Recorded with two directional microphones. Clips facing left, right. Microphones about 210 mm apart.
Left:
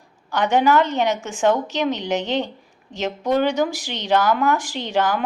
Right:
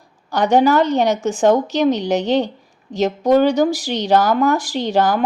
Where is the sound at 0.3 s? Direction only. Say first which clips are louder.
Right 4 dB; 35° right (ahead or behind).